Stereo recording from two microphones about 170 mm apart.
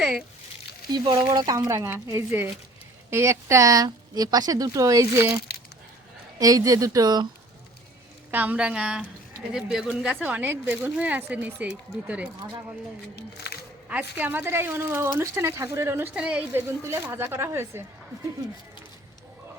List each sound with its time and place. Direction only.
0.0 s speech: centre (ahead or behind)
0.9 s a woman's voice: 25° right (ahead or behind)
6.4 s a woman's voice: 20° right (ahead or behind)
8.3 s speech: 10° right (ahead or behind)
13.1 s speech: 75° left (ahead or behind)
13.8 s speech: 10° right (ahead or behind)